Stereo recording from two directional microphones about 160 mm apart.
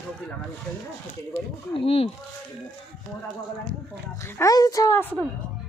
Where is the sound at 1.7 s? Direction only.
35° left (ahead or behind).